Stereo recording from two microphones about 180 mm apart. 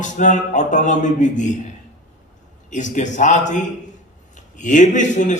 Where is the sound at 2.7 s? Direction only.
45° left (ahead or behind).